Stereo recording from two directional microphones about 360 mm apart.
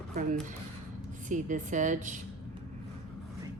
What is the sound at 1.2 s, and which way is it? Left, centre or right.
Speech, right.